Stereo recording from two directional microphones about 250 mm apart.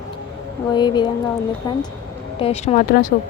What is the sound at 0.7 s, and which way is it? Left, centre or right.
Speech, centre.